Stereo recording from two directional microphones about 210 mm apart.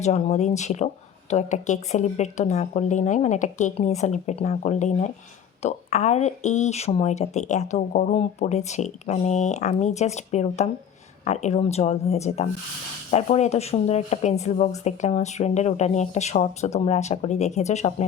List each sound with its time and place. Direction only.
0.0 s speech: 30° left (ahead or behind)